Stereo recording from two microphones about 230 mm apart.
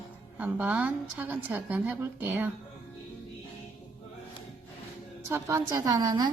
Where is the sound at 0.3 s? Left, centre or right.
Centre.